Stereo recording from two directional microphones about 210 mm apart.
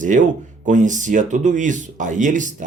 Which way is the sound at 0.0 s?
35° right (ahead or behind).